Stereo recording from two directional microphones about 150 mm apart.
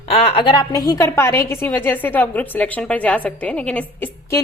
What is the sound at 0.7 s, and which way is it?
A woman's voice, 25° left (ahead or behind).